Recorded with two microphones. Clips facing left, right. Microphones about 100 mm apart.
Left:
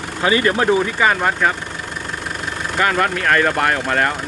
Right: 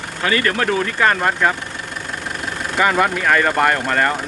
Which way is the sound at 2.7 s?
5° right (ahead or behind).